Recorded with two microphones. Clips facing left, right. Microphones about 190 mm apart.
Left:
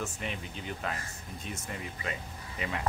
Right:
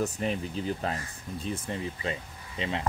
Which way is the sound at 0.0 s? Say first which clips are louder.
Right 8 dB; 35° right (ahead or behind).